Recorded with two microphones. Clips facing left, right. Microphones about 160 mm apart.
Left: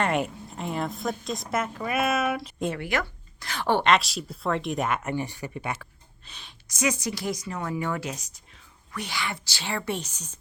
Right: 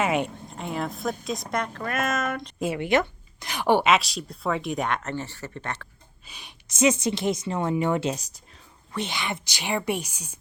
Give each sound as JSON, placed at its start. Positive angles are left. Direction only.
{"t": 0.0, "sound": "a woman's voice", "side_deg": 0}
{"t": 2.7, "sound": "a woman's voice", "side_deg": -20}
{"t": 6.2, "sound": "a woman's voice", "side_deg": -10}
{"t": 6.7, "sound": "a woman's voice", "side_deg": -25}